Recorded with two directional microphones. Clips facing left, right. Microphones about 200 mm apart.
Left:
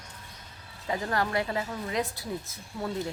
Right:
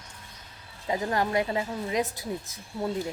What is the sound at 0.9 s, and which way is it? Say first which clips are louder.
Speech: right 2 dB; 20° right (ahead or behind).